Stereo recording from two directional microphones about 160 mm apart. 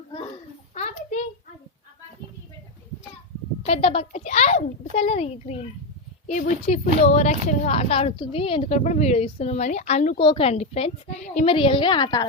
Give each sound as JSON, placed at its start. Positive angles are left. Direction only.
{"t": 0.7, "sound": "a sound", "side_deg": 45}
{"t": 3.7, "sound": "a child's voice", "side_deg": 40}
{"t": 8.8, "sound": "a child's voice", "side_deg": 45}
{"t": 10.2, "sound": "a woman's voice", "side_deg": 35}